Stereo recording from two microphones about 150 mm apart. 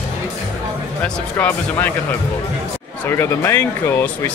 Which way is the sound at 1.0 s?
10° left (ahead or behind).